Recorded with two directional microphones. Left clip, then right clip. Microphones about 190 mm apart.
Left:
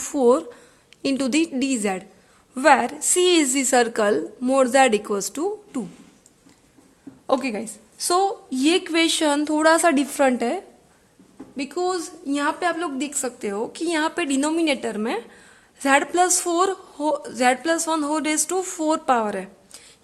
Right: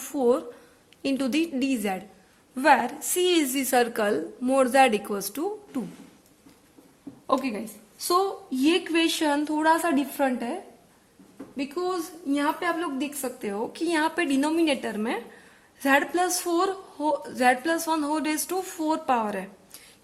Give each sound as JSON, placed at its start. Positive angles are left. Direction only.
{"t": 0.0, "sound": "a woman's voice", "side_deg": 35}
{"t": 7.3, "sound": "a woman's voice", "side_deg": 45}